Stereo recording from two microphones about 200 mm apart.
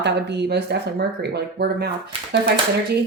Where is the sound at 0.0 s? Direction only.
60° right (ahead or behind).